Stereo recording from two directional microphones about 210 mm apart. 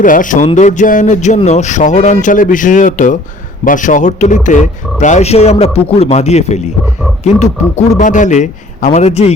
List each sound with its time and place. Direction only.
0.0 s speech: 40° left (ahead or behind)